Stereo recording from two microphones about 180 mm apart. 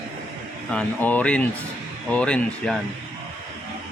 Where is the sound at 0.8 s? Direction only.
10° left (ahead or behind).